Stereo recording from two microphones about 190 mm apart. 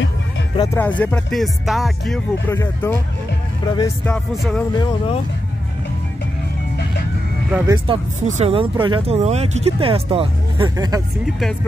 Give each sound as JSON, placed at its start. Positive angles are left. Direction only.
{"t": 0.6, "sound": "speech", "side_deg": 10}
{"t": 2.4, "sound": "speech", "side_deg": 10}
{"t": 3.6, "sound": "speech", "side_deg": 25}
{"t": 4.0, "sound": "speech", "side_deg": 5}
{"t": 4.7, "sound": "speech", "side_deg": 30}
{"t": 7.7, "sound": "speech", "side_deg": -25}